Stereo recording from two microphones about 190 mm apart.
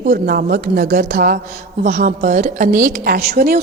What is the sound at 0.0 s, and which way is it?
A woman's voice, 50° right (ahead or behind).